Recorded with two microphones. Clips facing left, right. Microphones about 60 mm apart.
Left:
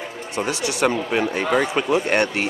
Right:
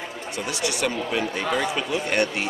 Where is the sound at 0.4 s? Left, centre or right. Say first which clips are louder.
Left 5 dB; left.